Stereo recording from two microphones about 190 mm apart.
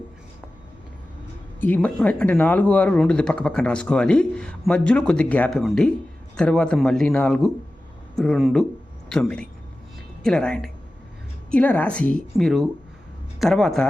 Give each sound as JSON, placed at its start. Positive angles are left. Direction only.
{"t": 1.6, "sound": "speech", "side_deg": 5}